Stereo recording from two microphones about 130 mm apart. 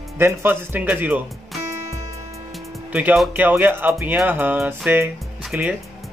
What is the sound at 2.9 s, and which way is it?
Speech, 10° right (ahead or behind).